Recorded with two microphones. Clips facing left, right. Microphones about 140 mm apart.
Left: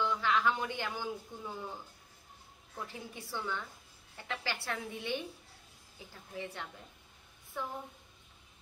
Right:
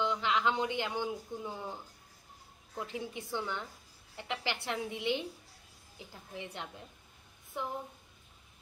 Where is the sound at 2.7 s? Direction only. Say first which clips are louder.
Right 5 dB; 15° right (ahead or behind).